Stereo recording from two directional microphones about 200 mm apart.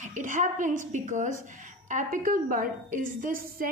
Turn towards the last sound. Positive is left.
turn(degrees=-45)  # may be behind; listen again after turning